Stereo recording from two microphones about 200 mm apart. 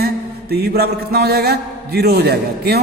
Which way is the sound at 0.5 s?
50° right (ahead or behind).